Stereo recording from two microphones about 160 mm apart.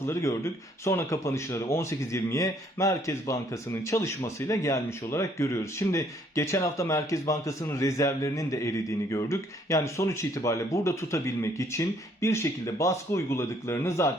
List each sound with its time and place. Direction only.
0.0 s speech: 20° left (ahead or behind)